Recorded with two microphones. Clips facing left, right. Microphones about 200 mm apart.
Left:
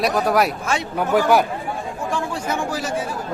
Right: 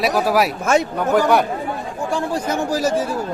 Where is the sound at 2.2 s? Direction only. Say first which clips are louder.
Right 4 dB; 40° right (ahead or behind).